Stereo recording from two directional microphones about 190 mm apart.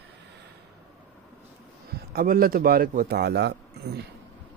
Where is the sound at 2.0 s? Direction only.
50° right (ahead or behind).